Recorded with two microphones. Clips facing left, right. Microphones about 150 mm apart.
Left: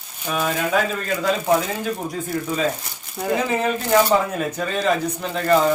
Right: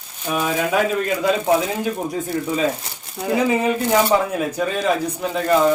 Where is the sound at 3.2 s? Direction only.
5° right (ahead or behind).